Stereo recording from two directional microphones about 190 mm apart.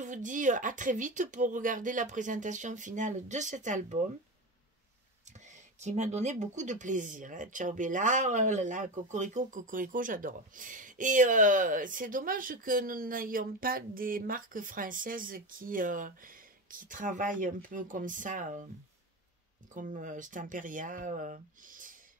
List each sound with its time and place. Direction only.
0.0 s speech: 40° right (ahead or behind)
5.5 s speech: 40° right (ahead or behind)
19.7 s speech: 40° right (ahead or behind)